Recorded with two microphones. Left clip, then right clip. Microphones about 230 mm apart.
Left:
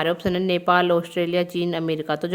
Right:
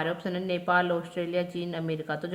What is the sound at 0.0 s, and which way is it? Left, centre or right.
Speech, left.